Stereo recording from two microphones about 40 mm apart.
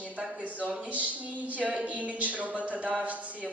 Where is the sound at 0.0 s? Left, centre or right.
Right.